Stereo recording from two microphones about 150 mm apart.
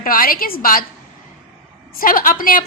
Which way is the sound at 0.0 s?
70° left (ahead or behind).